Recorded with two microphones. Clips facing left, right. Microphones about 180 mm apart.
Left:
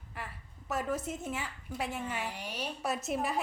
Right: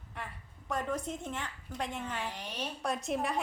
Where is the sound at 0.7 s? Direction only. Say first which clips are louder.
Left 1 dB; 5° left (ahead or behind).